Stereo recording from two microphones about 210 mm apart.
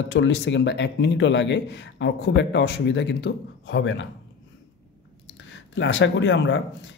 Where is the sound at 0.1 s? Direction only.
60° left (ahead or behind).